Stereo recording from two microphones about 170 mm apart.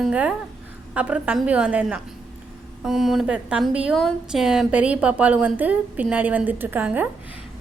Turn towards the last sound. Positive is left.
turn(degrees=-10)  # may be behind; listen again after turning